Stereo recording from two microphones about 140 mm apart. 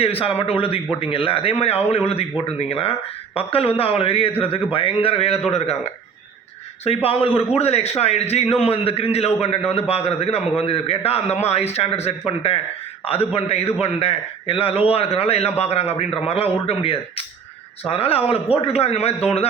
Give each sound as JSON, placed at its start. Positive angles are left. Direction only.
{"t": 0.0, "sound": "a man's voice", "side_deg": 45}